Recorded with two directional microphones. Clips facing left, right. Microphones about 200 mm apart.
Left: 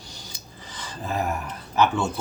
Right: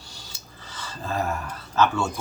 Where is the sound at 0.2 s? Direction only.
15° left (ahead or behind).